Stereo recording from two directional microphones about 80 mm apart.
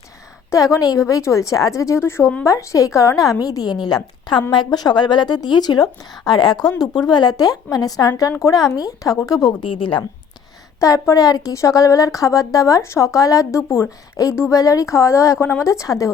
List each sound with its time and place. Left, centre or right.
0.5 s a woman's voice: left
9.8 s speech: left
10.8 s a woman's voice: left